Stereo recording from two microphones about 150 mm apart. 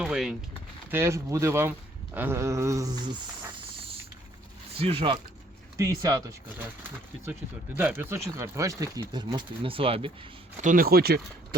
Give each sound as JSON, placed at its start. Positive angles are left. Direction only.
{"t": 0.0, "sound": "speech", "side_deg": -5}
{"t": 0.9, "sound": "speech", "side_deg": -15}
{"t": 4.8, "sound": "speech", "side_deg": -40}
{"t": 5.7, "sound": "speech", "side_deg": -20}
{"t": 7.8, "sound": "speech", "side_deg": -15}
{"t": 10.6, "sound": "speech", "side_deg": -65}